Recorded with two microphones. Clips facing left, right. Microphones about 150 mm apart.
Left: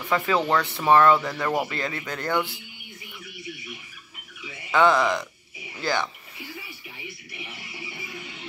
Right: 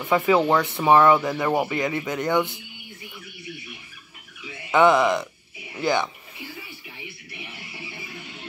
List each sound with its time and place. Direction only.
0.0 s speech: 20° right (ahead or behind)
4.7 s speech: 20° right (ahead or behind)